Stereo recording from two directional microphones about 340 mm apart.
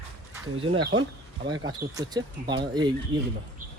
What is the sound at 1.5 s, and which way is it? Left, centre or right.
Speech, centre.